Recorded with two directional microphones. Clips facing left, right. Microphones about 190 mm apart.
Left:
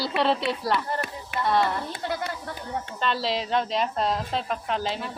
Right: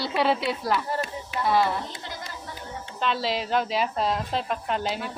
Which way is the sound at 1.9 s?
60° left (ahead or behind).